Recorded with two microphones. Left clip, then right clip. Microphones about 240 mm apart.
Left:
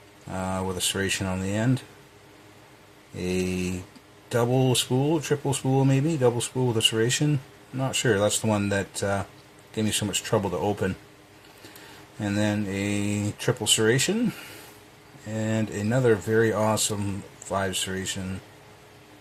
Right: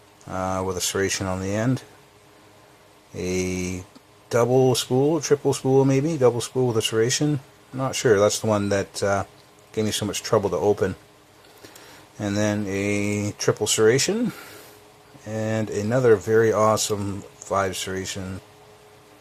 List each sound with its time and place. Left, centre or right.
0.3 s speech: right
3.2 s speech: right
12.2 s speech: right
15.3 s speech: right